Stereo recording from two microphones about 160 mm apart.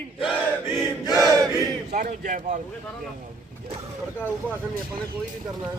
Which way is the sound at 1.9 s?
55° right (ahead or behind).